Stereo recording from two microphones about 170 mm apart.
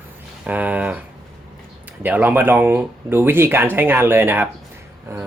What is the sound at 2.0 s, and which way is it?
Speech, 10° right (ahead or behind).